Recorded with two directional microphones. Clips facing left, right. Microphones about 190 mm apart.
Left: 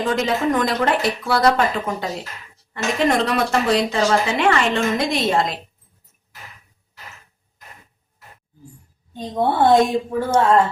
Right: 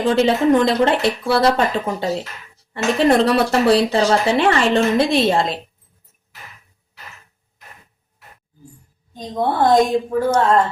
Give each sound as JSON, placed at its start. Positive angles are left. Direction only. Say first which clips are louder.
{"t": 0.0, "sound": "speech", "louder": "right 5 dB", "side_deg": -30}
{"t": 9.1, "sound": "a woman's voice", "louder": "even", "side_deg": 5}